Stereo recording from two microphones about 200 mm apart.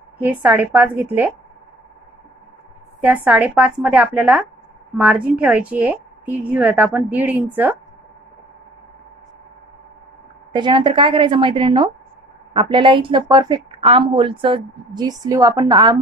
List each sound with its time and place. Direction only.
0.2 s a woman's voice: 10° right (ahead or behind)
3.3 s a woman's voice: 5° right (ahead or behind)
10.5 s a woman's voice: 25° right (ahead or behind)